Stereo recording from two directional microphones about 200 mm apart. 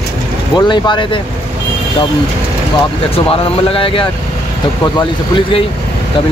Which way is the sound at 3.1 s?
30° left (ahead or behind).